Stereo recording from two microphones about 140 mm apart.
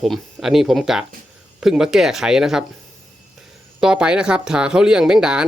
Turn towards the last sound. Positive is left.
turn(degrees=-5)  # may be behind; listen again after turning